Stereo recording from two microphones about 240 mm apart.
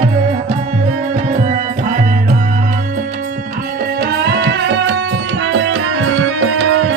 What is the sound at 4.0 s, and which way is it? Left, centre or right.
Music, right.